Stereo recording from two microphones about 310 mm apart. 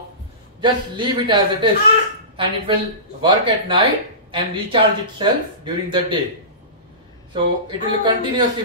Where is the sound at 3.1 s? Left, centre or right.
Centre.